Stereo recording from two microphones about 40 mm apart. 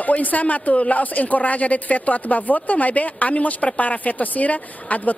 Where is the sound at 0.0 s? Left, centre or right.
Left.